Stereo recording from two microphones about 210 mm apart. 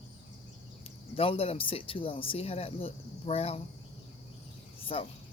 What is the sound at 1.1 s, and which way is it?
Speech, 25° left (ahead or behind).